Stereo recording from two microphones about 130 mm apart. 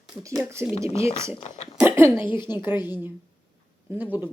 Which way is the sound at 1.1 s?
20° right (ahead or behind).